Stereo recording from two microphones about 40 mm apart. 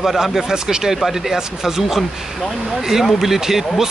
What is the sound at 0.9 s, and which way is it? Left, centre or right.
Speech, centre.